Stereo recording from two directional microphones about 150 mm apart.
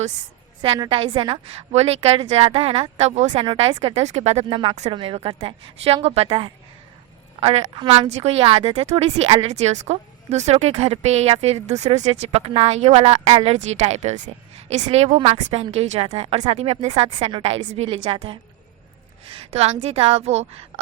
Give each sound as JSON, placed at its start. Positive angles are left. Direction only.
{"t": 0.6, "sound": "a woman's voice", "side_deg": -35}